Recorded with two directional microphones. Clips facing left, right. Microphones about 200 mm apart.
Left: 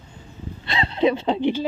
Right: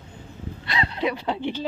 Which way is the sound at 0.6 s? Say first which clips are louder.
Left 6 dB; 25° left (ahead or behind).